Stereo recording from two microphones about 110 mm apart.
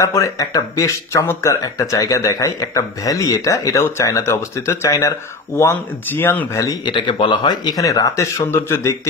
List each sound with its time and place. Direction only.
0.0 s speech: 30° left (ahead or behind)
6.8 s speech: 45° left (ahead or behind); by 8.9 s 20° left (ahead or behind)